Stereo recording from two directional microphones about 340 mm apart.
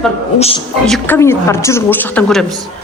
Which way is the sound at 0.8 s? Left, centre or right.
Centre.